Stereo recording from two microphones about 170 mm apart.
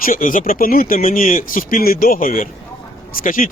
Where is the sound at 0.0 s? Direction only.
50° left (ahead or behind).